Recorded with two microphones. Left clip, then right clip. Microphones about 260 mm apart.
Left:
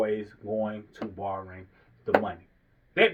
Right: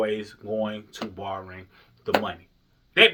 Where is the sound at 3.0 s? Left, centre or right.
Right.